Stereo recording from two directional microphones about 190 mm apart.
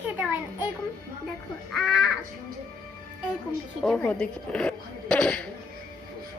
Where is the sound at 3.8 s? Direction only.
5° left (ahead or behind).